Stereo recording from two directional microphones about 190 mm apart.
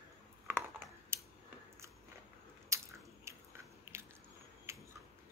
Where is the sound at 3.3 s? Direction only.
15° right (ahead or behind).